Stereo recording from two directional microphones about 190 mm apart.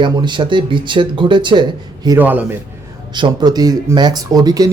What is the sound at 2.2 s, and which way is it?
Speech, 10° right (ahead or behind).